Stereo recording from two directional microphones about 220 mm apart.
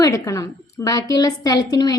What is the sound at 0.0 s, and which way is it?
A woman's voice, 15° left (ahead or behind).